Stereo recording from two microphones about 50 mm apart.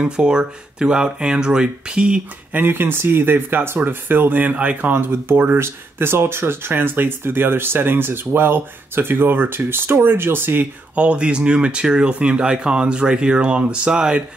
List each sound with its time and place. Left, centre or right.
0.0 s speech: centre
2.5 s speech: right
11.0 s speech: right